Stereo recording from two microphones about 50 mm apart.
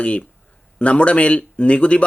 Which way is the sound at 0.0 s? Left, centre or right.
Left.